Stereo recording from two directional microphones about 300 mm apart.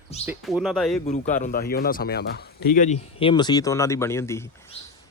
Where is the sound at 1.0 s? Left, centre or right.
Left.